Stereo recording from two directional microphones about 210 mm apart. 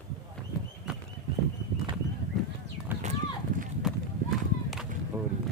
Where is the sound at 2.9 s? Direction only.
10° right (ahead or behind).